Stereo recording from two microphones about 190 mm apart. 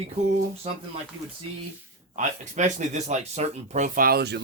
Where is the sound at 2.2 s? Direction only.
40° right (ahead or behind); by 4.4 s 60° right (ahead or behind).